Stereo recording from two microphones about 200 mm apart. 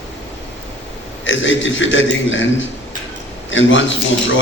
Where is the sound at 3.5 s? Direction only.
70° left (ahead or behind).